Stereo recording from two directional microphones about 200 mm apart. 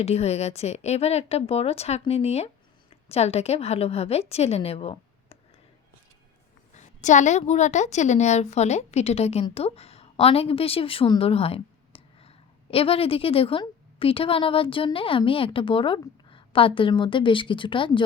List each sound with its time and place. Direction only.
0.0 s a woman's voice: 30° left (ahead or behind)
6.7 s a woman's voice: 35° left (ahead or behind)